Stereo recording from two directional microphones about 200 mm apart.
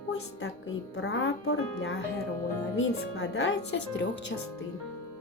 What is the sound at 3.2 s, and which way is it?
Speech, 85° left.